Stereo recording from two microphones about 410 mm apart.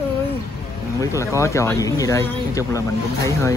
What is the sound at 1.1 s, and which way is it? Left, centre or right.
Speech, centre.